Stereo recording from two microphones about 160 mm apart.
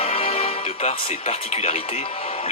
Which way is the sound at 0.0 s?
35° left (ahead or behind).